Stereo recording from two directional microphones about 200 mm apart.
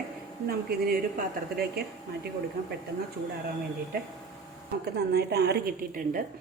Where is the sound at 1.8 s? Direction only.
50° right (ahead or behind).